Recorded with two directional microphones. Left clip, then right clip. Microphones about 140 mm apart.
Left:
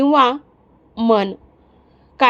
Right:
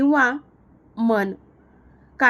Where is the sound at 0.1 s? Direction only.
40° left (ahead or behind).